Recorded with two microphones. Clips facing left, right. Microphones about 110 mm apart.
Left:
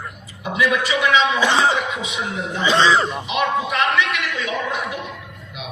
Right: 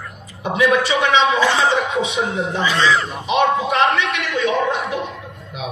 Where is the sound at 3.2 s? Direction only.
30° right (ahead or behind).